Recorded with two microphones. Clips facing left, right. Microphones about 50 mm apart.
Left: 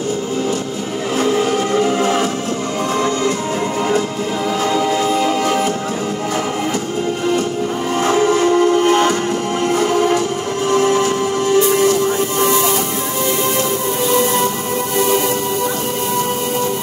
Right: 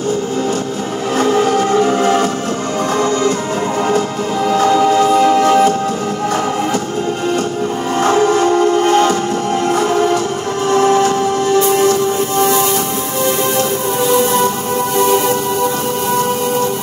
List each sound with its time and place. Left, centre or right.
1.1 s music: right
4.6 s music: right
8.0 s music: right